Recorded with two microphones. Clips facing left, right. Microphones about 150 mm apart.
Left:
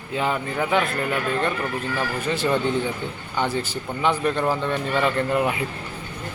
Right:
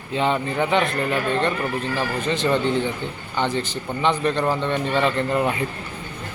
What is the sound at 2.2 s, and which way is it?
A man's voice, 10° left (ahead or behind).